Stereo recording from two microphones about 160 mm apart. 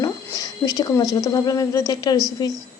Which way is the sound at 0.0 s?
20° left (ahead or behind).